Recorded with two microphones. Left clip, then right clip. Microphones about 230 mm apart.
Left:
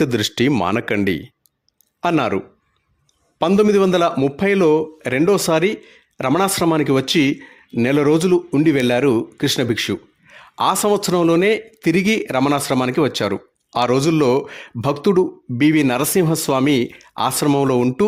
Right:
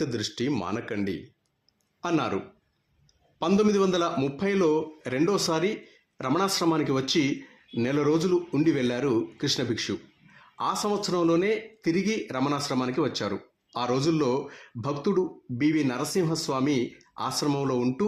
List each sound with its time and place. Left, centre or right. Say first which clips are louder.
0.0 s a man's voice: left 12 dB; left